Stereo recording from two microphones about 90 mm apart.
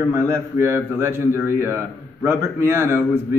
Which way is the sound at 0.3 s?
30° right (ahead or behind).